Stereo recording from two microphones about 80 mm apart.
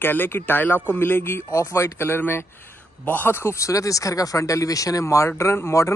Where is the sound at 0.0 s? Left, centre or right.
Left.